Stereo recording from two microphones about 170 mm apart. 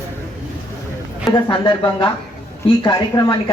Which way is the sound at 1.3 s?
25° left (ahead or behind).